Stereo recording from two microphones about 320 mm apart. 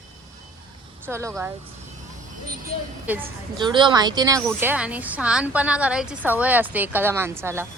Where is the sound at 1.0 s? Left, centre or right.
Centre.